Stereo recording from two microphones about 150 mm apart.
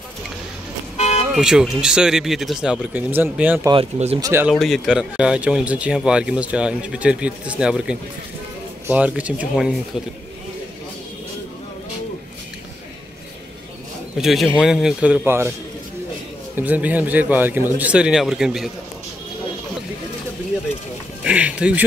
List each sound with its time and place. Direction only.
0.9 s vehicle: 45° left (ahead or behind)
1.3 s speech: 5° right (ahead or behind)
3.7 s speech: 40° right (ahead or behind)
4.2 s a man's voice: 15° right (ahead or behind)
4.5 s a man's voice: centre (ahead or behind)
14.1 s a man's voice: centre (ahead or behind)
16.5 s a man's voice: 10° right (ahead or behind)
21.2 s a man's voice: 5° right (ahead or behind)